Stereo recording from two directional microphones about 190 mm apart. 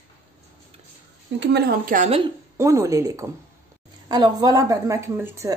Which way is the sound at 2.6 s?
15° right (ahead or behind).